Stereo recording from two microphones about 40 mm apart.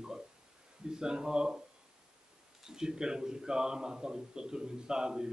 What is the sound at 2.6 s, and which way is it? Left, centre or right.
A man's voice, centre.